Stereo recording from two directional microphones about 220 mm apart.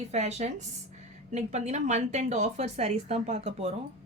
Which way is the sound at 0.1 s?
30° right (ahead or behind).